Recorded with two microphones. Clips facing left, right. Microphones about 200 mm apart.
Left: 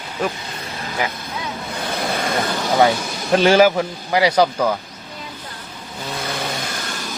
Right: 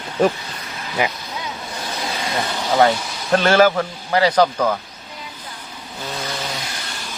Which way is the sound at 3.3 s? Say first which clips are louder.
Left 1 dB; 10° left (ahead or behind).